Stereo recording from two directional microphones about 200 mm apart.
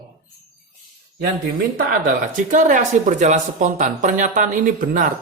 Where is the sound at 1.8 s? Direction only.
45° right (ahead or behind).